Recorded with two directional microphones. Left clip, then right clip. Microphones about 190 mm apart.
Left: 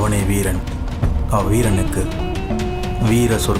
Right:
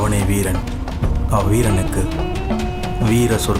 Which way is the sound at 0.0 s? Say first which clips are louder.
Even; centre (ahead or behind).